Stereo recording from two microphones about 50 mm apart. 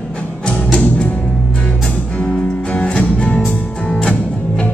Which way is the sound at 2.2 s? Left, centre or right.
Left.